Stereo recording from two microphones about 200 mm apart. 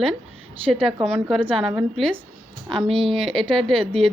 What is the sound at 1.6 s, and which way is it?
Speech, centre (ahead or behind).